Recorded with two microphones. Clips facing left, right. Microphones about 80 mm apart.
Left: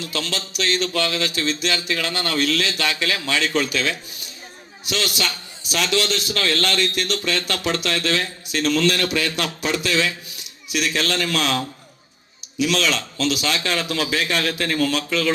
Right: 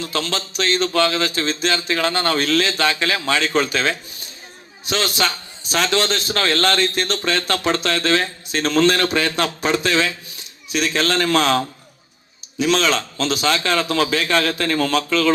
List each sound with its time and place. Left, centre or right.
0.0 s a man's voice: right